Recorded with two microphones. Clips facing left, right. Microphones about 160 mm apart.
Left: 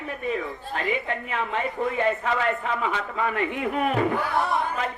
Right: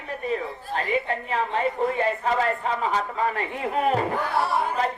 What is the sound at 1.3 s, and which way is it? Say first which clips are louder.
A woman's voice: right 4 dB; 35° right (ahead or behind).